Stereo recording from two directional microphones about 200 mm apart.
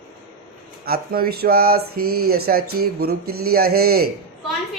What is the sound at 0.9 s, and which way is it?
Speech, 50° right (ahead or behind).